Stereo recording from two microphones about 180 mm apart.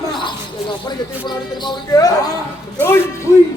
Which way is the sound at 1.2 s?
25° left (ahead or behind).